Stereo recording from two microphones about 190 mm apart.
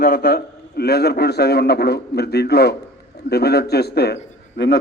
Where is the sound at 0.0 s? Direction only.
60° left (ahead or behind).